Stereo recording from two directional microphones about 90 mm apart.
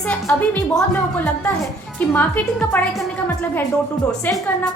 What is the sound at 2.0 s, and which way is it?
Speech, 20° left (ahead or behind).